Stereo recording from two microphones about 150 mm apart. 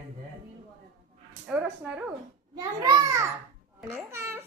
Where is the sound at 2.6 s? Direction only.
25° right (ahead or behind).